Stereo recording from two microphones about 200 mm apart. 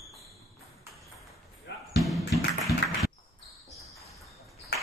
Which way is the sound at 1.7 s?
60° left (ahead or behind).